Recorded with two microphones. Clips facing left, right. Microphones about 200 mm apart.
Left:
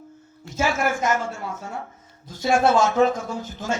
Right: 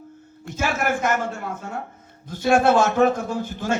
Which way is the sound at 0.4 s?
55° right (ahead or behind).